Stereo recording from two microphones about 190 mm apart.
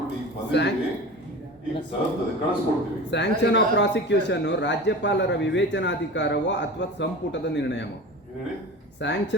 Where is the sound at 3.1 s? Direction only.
65° left (ahead or behind).